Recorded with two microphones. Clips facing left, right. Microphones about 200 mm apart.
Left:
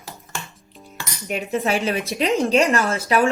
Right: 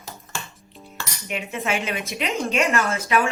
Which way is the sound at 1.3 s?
35° left (ahead or behind).